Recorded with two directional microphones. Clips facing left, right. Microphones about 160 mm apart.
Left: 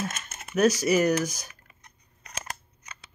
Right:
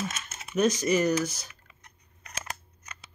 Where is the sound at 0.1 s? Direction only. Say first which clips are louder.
Left 1 dB; 50° left (ahead or behind).